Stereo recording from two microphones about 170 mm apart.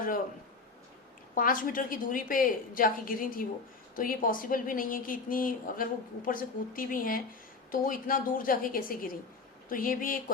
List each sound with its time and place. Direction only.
1.4 s a woman's voice: 55° left (ahead or behind)